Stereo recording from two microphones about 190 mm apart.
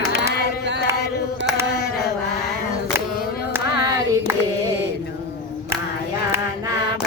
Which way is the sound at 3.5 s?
20° right (ahead or behind).